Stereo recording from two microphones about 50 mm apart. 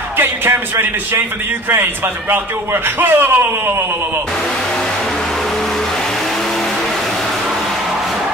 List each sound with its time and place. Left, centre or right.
0.2 s speech: right